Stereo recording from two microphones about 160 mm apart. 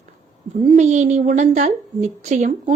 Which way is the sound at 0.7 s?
45° right (ahead or behind).